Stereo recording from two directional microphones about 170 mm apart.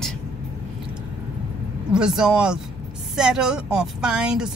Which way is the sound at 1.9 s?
5° right (ahead or behind).